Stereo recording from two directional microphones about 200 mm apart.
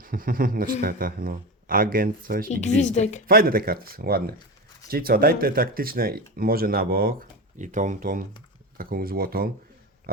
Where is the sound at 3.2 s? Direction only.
45° right (ahead or behind).